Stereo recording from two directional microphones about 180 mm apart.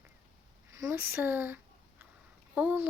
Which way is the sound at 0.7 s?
15° right (ahead or behind).